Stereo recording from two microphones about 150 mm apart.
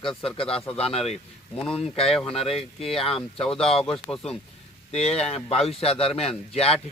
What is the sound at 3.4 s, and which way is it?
Speech, 5° left (ahead or behind).